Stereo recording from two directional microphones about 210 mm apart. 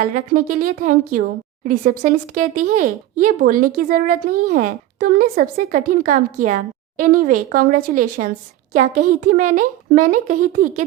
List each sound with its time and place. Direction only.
0.0 s speech: 40° right (ahead or behind)